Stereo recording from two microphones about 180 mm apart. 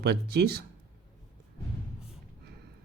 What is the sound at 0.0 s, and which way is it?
Speech, 65° right (ahead or behind).